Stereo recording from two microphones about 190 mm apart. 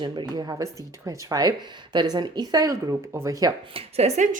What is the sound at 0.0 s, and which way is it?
Speech, 20° right (ahead or behind).